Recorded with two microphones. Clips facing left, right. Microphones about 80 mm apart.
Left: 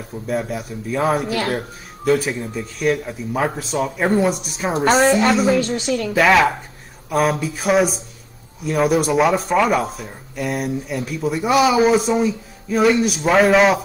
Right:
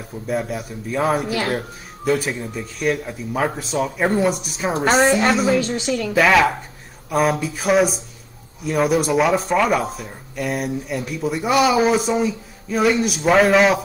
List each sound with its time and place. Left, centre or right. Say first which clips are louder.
0.3 s speech: even; centre